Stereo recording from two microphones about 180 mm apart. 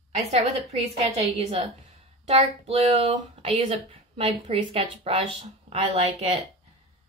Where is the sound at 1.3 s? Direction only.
35° right (ahead or behind).